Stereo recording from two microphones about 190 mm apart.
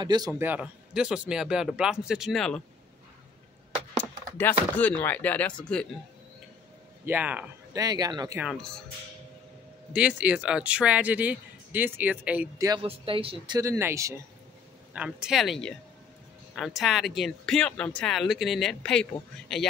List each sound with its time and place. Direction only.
0.0 s speech: 20° right (ahead or behind)
0.3 s speech: 10° right (ahead or behind)
4.0 s speech: 10° left (ahead or behind)
7.1 s a man's voice: 10° right (ahead or behind)
7.7 s speech: 20° right (ahead or behind)
8.4 s speech: centre (ahead or behind)
9.9 s a man's voice: 5° right (ahead or behind)
12.6 s speech: 25° right (ahead or behind)
13.6 s a man's voice: 15° right (ahead or behind)